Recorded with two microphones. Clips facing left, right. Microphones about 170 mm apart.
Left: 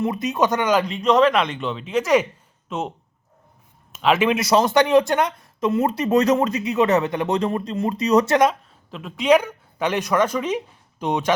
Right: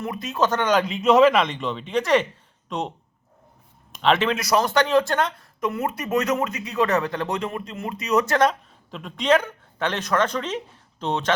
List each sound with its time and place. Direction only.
0.0 s speech: 20° left (ahead or behind); by 2.9 s 5° left (ahead or behind)
3.9 s speech: 5° left (ahead or behind)
4.3 s speech: 25° left (ahead or behind)
6.7 s speech: 20° left (ahead or behind)
7.3 s speech: 35° left (ahead or behind)
8.4 s a woman's voice: 5° left (ahead or behind)